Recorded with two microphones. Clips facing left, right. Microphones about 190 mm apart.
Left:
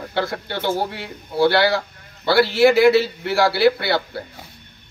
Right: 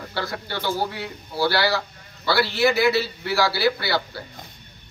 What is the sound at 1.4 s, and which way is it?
A woman's voice, 50° left (ahead or behind).